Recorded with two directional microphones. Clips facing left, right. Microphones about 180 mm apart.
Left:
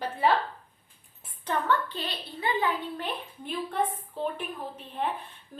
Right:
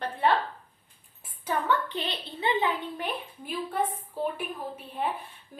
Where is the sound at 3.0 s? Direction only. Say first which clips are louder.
Even; 5° right (ahead or behind).